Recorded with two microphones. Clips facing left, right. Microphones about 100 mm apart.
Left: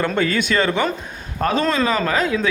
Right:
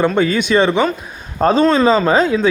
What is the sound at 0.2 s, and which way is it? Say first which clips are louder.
Speech: right 5 dB; 20° right (ahead or behind).